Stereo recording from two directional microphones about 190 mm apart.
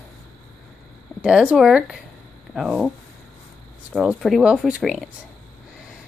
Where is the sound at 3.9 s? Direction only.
Centre (ahead or behind).